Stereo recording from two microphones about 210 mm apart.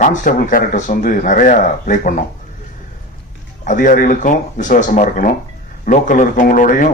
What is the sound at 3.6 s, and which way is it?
A man's voice, 40° left (ahead or behind).